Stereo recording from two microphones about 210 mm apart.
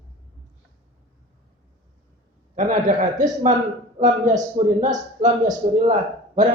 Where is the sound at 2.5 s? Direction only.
35° right (ahead or behind).